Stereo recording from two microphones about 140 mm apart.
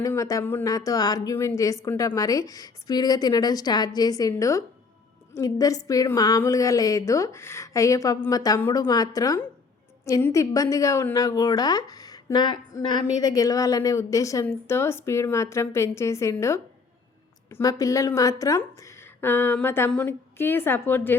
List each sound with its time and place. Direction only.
0.0 s a woman's voice: 25° left (ahead or behind)